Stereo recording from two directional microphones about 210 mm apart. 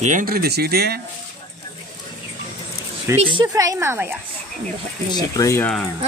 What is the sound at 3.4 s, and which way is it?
Speech, 15° right (ahead or behind).